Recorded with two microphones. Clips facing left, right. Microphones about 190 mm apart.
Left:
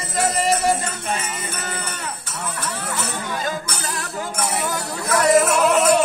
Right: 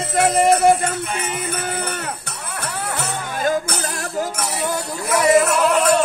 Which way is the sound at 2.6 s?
60° right (ahead or behind).